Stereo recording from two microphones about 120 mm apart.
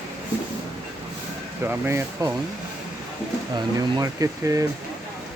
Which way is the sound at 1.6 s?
15° right (ahead or behind).